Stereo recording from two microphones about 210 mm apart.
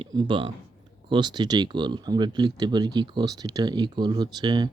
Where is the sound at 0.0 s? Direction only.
20° right (ahead or behind).